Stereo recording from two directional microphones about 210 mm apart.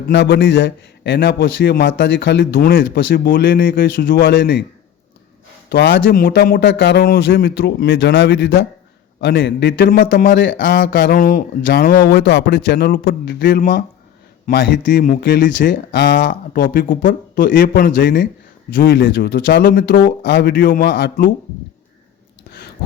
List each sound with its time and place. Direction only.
0.1 s a man's voice: 60° left (ahead or behind)
4.4 s a man's voice: 55° left (ahead or behind)
5.6 s a man's voice: 55° left (ahead or behind)
14.8 s speech: 40° left (ahead or behind)
15.9 s a man's voice: 55° left (ahead or behind)
16.3 s a man's voice: 40° left (ahead or behind)